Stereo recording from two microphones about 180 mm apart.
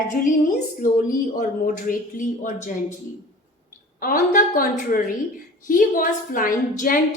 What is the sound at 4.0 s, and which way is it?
A woman's voice, 50° left (ahead or behind).